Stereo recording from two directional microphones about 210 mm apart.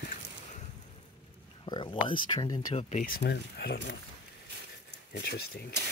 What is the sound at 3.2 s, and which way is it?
Speech, 50° left (ahead or behind).